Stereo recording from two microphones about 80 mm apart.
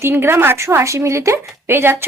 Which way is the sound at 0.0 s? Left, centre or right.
Right.